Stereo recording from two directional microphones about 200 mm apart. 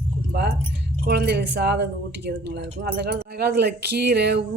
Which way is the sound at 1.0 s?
55° right (ahead or behind).